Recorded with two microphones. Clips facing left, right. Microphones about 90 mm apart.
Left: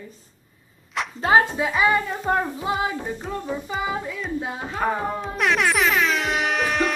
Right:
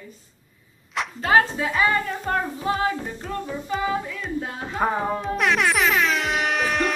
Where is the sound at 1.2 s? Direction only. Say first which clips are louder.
Left 1 dB; 20° left (ahead or behind).